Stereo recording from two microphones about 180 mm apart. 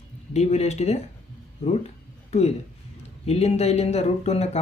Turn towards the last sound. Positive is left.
turn(degrees=35)  # may be behind; listen again after turning